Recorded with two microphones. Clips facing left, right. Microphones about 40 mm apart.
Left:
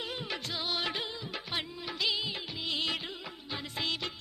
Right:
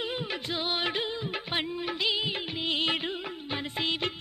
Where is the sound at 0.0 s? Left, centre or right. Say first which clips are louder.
Right 4 dB; right.